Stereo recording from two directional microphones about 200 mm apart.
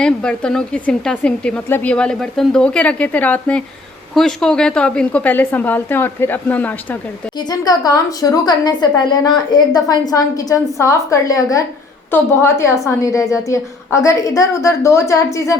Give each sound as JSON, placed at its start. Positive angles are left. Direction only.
{"t": 0.0, "sound": "a woman's voice", "side_deg": 5}